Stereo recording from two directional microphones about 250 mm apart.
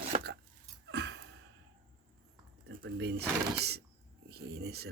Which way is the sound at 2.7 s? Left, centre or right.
Right.